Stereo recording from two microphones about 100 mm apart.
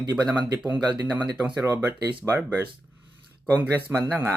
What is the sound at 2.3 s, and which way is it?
Speech, 25° right (ahead or behind).